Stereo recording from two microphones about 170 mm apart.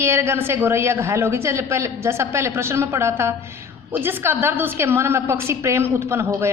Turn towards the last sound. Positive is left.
turn(degrees=-15)  # may be behind; listen again after turning